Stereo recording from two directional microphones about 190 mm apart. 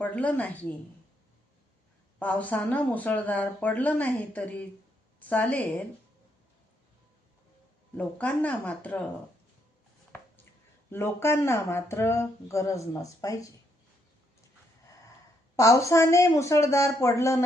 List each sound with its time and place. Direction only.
0.0 s speech: 5° left (ahead or behind)
2.1 s speech: 10° left (ahead or behind)
7.9 s speech: 10° left (ahead or behind)
10.9 s speech: 15° left (ahead or behind)
15.5 s speech: 15° left (ahead or behind)